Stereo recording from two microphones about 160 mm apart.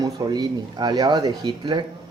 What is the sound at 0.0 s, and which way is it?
Speech, 25° right (ahead or behind).